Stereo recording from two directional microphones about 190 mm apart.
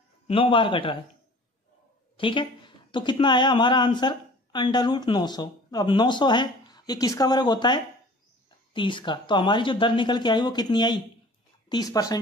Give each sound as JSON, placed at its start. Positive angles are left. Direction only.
{"t": 0.3, "sound": "speech", "side_deg": 25}
{"t": 2.1, "sound": "a woman's voice", "side_deg": 25}